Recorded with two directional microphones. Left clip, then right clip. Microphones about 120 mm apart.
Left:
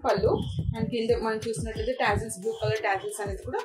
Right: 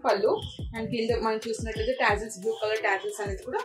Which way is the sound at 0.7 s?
25° left (ahead or behind).